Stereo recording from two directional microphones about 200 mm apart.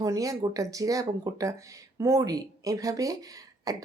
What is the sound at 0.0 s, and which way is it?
Speech, 15° right (ahead or behind).